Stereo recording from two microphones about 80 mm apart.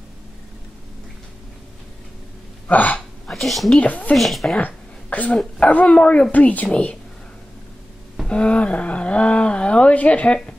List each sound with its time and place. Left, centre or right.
2.7 s speech: centre
3.3 s speech: centre
3.8 s speech: left
4.1 s speech: centre
4.6 s a sound: centre
5.4 s speech: centre
8.3 s speech: centre